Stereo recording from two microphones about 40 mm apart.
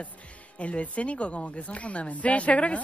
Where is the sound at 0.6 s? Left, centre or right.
Left.